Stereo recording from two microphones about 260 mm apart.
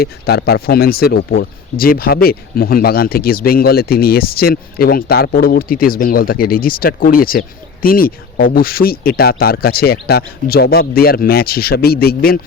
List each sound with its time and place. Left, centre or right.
0.0 s speech: left